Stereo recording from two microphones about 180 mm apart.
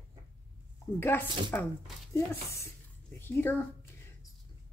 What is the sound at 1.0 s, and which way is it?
Speech, 10° left (ahead or behind).